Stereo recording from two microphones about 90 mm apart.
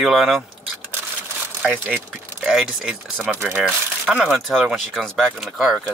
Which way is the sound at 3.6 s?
10° right (ahead or behind).